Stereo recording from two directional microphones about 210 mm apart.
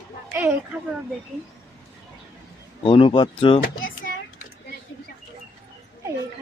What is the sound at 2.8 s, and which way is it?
Speech, 25° left (ahead or behind).